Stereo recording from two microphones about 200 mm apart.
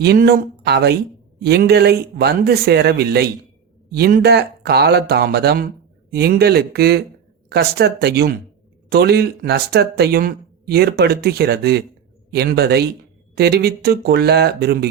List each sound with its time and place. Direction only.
0.0 s speech: 50° right (ahead or behind)